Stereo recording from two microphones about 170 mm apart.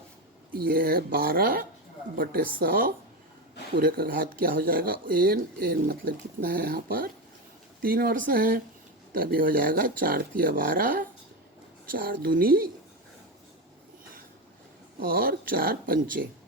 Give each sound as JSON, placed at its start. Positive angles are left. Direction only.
{"t": 0.7, "sound": "speech", "side_deg": -60}
{"t": 14.9, "sound": "speech", "side_deg": -60}